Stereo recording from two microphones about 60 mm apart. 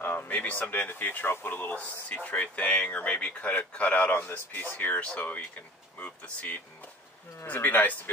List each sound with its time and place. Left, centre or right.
0.0 s speech: left
5.9 s a sound: left
7.4 s speech: left